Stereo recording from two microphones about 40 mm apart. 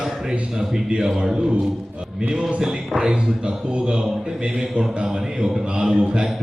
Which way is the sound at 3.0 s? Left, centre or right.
Right.